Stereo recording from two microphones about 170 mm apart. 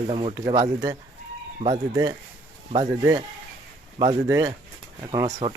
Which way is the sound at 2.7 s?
20° right (ahead or behind).